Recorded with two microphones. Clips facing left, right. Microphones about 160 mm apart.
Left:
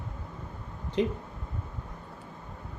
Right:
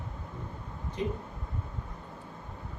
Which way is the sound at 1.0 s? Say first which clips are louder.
Left 6 dB; 75° left (ahead or behind).